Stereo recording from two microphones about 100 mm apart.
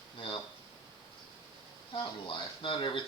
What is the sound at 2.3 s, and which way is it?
Speech, 55° left (ahead or behind).